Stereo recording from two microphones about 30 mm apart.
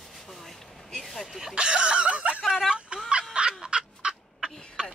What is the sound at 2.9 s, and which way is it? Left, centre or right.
Fowl, right.